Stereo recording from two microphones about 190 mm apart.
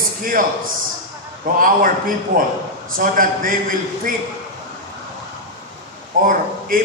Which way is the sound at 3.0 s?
45° right (ahead or behind).